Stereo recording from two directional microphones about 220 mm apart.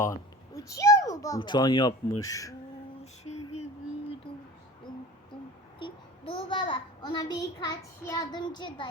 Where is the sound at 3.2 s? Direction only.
30° left (ahead or behind).